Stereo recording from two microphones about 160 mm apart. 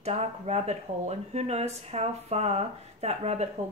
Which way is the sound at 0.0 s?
40° right (ahead or behind).